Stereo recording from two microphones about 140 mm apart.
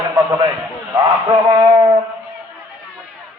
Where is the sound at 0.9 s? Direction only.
30° right (ahead or behind).